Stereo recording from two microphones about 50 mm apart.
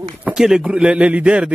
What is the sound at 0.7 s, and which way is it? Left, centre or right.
Speech, centre.